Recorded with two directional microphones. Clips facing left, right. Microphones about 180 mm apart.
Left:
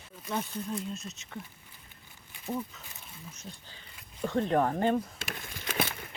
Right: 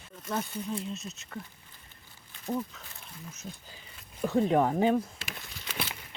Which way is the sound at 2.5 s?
Centre (ahead or behind).